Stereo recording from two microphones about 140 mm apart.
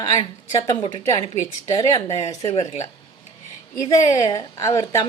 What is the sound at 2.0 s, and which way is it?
Speech, 45° left (ahead or behind).